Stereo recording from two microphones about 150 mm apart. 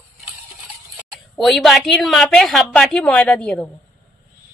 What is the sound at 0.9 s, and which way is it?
A woman's voice, centre (ahead or behind).